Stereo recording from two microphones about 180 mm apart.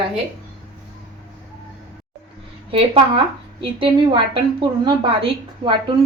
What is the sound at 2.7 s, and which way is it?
A woman's voice, 30° right (ahead or behind).